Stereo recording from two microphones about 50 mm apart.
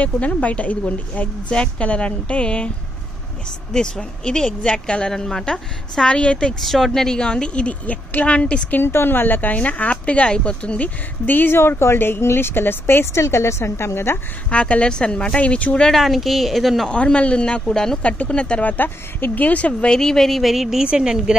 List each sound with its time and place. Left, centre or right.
0.0 s speech: left
3.7 s speech: centre
6.6 s speech: centre
7.2 s speech: centre
8.7 s speech: left
11.2 s speech: left
14.5 s speech: left
15.9 s a woman's voice: centre
16.9 s speech: left
18.0 s speech: left
19.9 s speech: centre
20.5 s speech: centre